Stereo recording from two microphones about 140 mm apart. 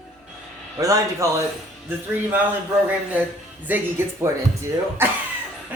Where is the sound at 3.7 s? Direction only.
15° right (ahead or behind).